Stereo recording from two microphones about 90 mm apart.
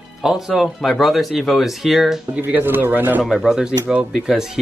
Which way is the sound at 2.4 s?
20° right (ahead or behind).